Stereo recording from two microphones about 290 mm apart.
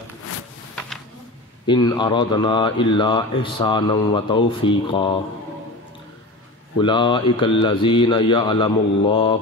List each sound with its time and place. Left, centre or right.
1.7 s speech: centre
6.8 s speech: centre